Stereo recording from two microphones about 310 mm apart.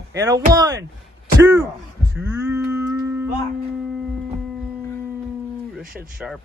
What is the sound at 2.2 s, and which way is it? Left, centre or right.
Livestock, centre.